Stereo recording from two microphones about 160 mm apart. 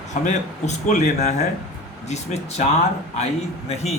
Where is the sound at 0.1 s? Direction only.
50° left (ahead or behind).